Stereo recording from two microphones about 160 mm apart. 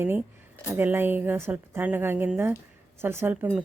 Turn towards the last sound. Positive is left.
turn(degrees=-15)  # may be behind; listen again after turning